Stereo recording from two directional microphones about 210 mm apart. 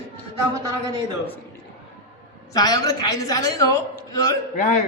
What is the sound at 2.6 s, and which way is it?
A woman's voice, 20° left (ahead or behind).